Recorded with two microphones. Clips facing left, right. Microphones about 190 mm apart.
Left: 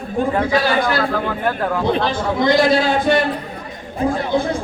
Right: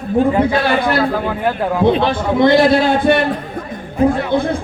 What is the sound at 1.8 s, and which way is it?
Speech, 60° right (ahead or behind).